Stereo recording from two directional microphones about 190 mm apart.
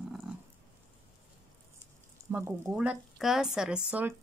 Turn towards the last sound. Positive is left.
turn(degrees=-5)  # may be behind; listen again after turning